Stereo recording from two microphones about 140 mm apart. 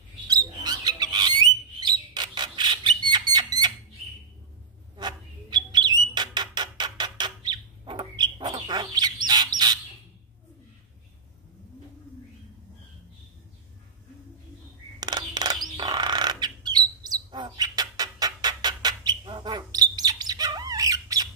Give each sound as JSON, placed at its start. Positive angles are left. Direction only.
{"t": 0.3, "sound": "bird", "side_deg": -30}
{"t": 4.9, "sound": "bird", "side_deg": -30}
{"t": 15.0, "sound": "bird", "side_deg": -30}